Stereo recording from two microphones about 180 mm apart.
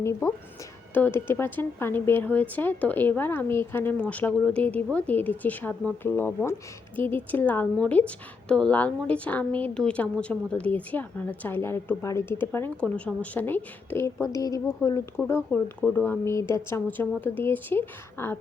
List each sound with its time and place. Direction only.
0.0 s speech: 15° left (ahead or behind)